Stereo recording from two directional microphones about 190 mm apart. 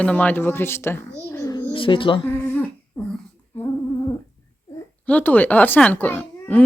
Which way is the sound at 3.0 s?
5° left (ahead or behind).